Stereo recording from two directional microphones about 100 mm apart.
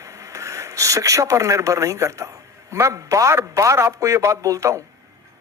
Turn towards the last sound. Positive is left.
turn(degrees=-30)  # may be behind; listen again after turning